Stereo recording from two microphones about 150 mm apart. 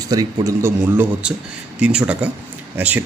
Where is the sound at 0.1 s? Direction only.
25° right (ahead or behind).